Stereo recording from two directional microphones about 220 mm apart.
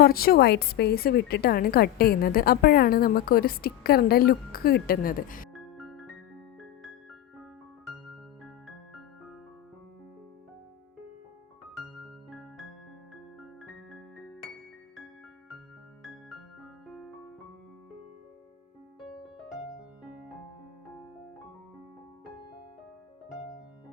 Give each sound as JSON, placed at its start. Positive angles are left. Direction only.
{"t": 0.0, "sound": "a woman's voice", "side_deg": 45}
{"t": 5.5, "sound": "music", "side_deg": 0}
{"t": 12.3, "sound": "music", "side_deg": 0}
{"t": 13.4, "sound": "piano", "side_deg": 0}
{"t": 18.9, "sound": "music", "side_deg": 0}